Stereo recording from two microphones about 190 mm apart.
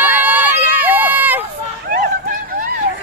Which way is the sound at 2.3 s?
50° right (ahead or behind).